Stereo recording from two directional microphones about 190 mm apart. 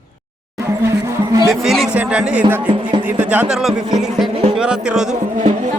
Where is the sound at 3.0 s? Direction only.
10° right (ahead or behind).